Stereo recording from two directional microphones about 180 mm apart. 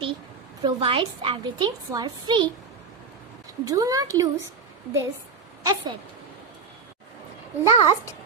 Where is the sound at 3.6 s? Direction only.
20° right (ahead or behind).